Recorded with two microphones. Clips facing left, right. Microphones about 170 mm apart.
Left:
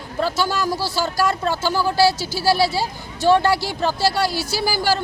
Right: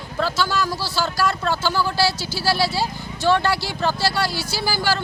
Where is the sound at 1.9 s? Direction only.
45° left (ahead or behind).